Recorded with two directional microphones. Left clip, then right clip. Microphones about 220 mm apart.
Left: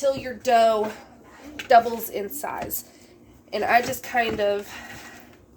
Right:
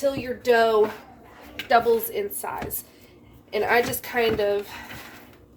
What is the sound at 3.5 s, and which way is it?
A woman's voice, 35° left (ahead or behind).